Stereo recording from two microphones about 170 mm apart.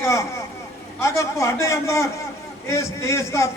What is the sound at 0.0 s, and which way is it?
A man's voice, 15° left (ahead or behind).